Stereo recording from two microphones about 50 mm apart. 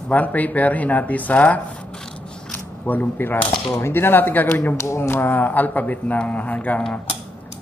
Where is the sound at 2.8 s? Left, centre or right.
Left.